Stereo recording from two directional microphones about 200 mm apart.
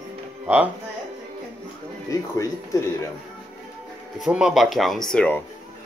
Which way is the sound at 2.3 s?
15° left (ahead or behind).